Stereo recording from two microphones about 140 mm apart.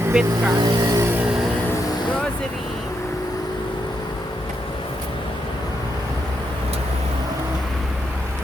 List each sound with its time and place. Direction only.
0.1 s speech: 5° right (ahead or behind)
0.5 s speech: 30° right (ahead or behind)